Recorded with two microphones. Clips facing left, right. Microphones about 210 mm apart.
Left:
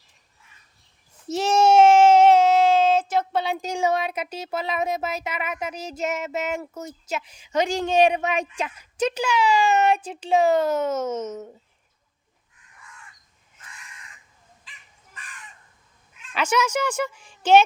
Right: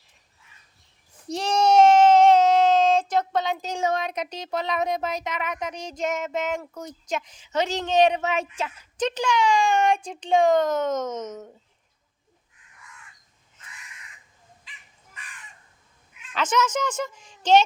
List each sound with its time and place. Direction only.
1.3 s speech: 5° left (ahead or behind)
16.3 s a child's voice: 10° left (ahead or behind)